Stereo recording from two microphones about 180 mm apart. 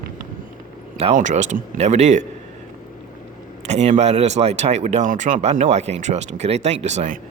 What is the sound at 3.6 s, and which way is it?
Speech, 40° right (ahead or behind).